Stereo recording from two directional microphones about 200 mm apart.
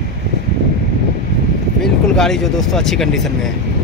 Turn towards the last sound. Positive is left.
turn(degrees=0)  # may be behind; listen again after turning